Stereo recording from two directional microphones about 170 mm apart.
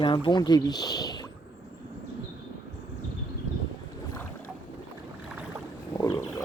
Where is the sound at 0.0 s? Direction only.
30° left (ahead or behind).